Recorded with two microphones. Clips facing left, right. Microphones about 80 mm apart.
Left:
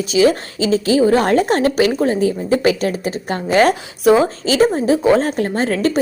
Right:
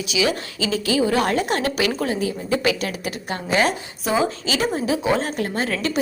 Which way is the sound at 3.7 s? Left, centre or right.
Left.